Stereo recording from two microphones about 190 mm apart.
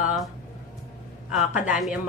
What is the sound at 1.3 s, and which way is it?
Speech, 5° right (ahead or behind).